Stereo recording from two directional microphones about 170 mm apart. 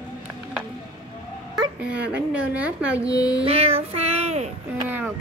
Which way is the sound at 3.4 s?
35° right (ahead or behind).